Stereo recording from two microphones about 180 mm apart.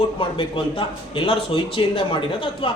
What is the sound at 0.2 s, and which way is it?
A man's voice, 30° left (ahead or behind).